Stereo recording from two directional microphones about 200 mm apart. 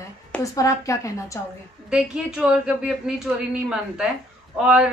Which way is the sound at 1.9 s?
5° right (ahead or behind).